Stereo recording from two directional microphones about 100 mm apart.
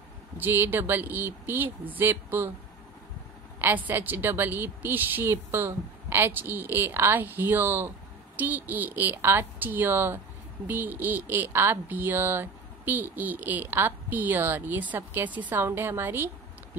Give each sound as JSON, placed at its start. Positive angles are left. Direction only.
{"t": 0.4, "sound": "speech", "side_deg": -20}
{"t": 3.6, "sound": "speech", "side_deg": -20}